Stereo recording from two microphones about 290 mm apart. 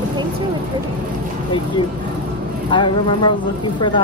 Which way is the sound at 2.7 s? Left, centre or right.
Centre.